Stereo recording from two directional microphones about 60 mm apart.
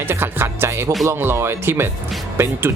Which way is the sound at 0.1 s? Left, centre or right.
Right.